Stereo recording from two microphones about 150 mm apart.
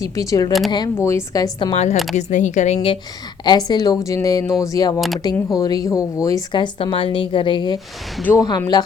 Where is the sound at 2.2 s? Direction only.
55° left (ahead or behind).